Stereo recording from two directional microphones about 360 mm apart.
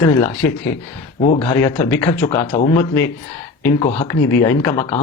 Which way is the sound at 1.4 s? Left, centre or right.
Centre.